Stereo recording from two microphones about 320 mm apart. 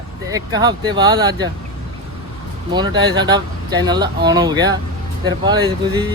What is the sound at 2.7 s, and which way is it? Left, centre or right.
Speech, centre.